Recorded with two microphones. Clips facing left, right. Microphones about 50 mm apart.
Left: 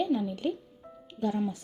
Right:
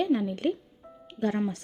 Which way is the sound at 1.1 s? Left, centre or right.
Right.